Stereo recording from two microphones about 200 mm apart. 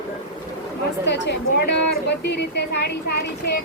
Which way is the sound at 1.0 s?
60° left (ahead or behind).